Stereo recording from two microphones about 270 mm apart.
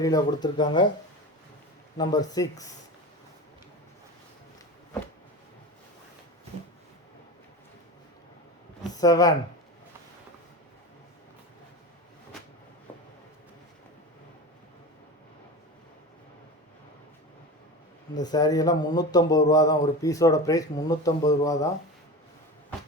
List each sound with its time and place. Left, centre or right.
0.0 s speech: centre
2.0 s speech: centre
9.0 s speech: centre
18.1 s speech: centre